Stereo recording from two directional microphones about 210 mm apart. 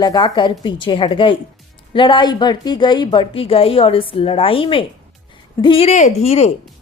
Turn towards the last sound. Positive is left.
turn(degrees=30)  # may be behind; listen again after turning